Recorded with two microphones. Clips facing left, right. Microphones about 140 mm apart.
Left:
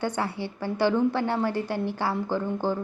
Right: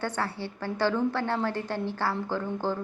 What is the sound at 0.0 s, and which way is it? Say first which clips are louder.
A woman's voice: left 3 dB; 15° left (ahead or behind).